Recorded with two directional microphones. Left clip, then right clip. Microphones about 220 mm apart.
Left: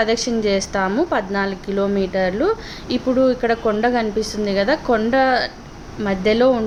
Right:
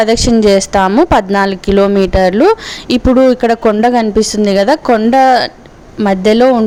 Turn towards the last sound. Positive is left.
turn(degrees=-40)  # may be behind; listen again after turning